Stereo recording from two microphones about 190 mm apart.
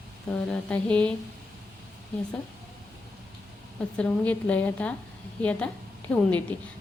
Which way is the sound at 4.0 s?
5° left (ahead or behind).